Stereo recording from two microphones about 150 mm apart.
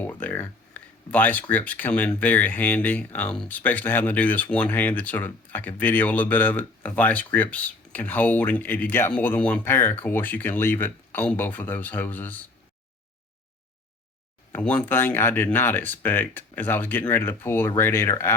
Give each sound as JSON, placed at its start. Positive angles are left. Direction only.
{"t": 0.0, "sound": "speech", "side_deg": 10}
{"t": 14.5, "sound": "speech", "side_deg": 10}